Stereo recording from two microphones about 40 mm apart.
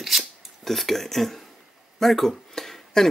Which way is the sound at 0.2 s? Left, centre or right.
Centre.